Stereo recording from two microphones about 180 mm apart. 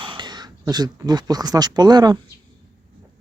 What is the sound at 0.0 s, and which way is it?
Speech, 25° right (ahead or behind).